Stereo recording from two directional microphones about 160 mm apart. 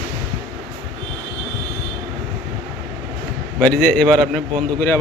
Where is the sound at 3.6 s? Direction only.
5° left (ahead or behind).